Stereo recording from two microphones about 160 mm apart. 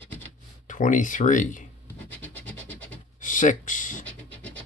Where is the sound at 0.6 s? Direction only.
50° left (ahead or behind).